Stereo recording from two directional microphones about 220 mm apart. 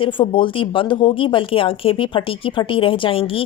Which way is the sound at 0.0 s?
20° left (ahead or behind).